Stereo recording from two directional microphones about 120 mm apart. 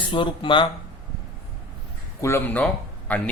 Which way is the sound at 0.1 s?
45° left (ahead or behind).